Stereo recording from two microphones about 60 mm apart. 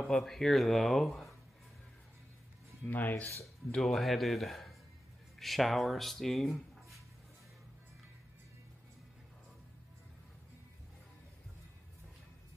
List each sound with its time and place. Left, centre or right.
0.1 s speech: centre
2.9 s speech: left
3.7 s speech: centre